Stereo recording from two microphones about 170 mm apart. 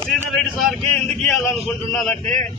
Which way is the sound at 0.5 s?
Centre (ahead or behind).